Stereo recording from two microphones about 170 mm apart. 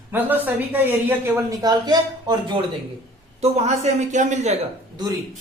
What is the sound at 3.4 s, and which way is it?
A man's voice, 40° right (ahead or behind).